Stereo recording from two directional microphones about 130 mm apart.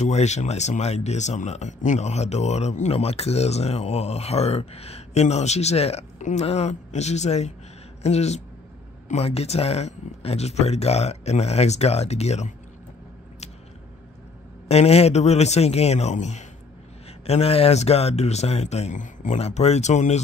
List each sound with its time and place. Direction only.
0.0 s speech: 60° left (ahead or behind)
14.7 s speech: 55° left (ahead or behind)
17.3 s speech: 50° left (ahead or behind)